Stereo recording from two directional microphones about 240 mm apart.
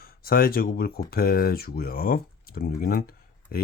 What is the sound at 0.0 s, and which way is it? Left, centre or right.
Speech, left.